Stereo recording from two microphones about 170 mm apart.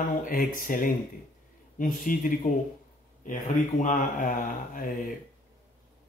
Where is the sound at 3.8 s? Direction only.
50° left (ahead or behind).